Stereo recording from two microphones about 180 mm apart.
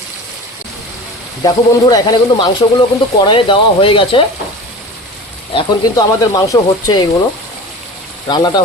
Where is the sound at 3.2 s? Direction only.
25° left (ahead or behind).